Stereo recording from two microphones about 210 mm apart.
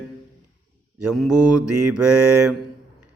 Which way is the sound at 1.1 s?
5° right (ahead or behind).